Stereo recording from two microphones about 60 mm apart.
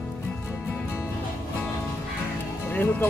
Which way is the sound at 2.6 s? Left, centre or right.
Left.